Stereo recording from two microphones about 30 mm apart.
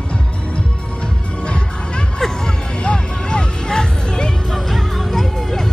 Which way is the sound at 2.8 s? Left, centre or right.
Left.